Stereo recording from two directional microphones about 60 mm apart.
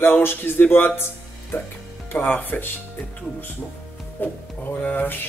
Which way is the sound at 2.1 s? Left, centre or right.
Left.